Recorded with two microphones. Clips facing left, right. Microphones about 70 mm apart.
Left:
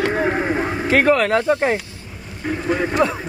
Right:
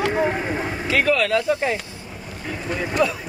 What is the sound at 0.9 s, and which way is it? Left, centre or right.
Speech, left.